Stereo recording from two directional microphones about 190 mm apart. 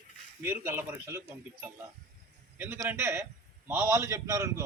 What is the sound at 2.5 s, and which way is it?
A man's voice, 10° right (ahead or behind).